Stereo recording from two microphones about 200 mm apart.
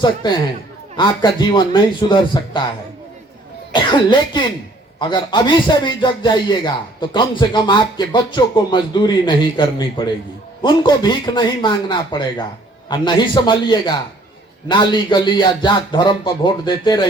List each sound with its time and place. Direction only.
0.0 s a man's voice: 20° left (ahead or behind)
3.7 s a man's voice: 25° left (ahead or behind)